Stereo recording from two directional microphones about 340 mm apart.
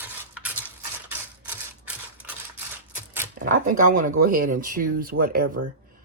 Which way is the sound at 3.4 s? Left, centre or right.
Right.